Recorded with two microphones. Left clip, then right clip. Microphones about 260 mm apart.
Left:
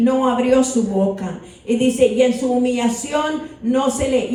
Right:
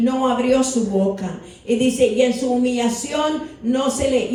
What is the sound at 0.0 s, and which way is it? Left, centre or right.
Speech, left.